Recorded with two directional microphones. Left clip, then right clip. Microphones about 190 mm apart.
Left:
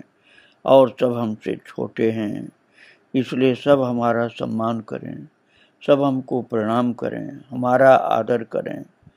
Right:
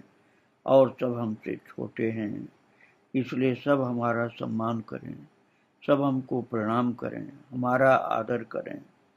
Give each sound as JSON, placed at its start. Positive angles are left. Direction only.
{"t": 0.7, "sound": "speech", "side_deg": 40}